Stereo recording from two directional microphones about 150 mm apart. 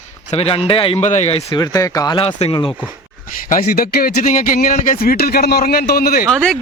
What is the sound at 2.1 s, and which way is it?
Speech, 40° left (ahead or behind).